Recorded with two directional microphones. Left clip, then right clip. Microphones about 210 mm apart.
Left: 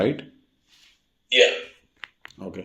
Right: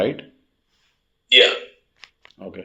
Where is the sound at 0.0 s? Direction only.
25° left (ahead or behind).